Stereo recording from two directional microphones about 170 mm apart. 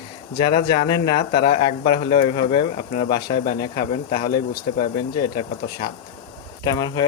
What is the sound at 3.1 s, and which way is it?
Speech, 60° left (ahead or behind).